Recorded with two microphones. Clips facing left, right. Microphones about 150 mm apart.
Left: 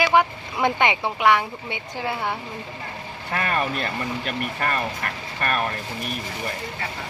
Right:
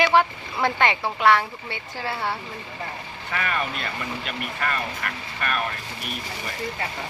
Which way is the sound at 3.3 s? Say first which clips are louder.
Left 3 dB; 45° left (ahead or behind).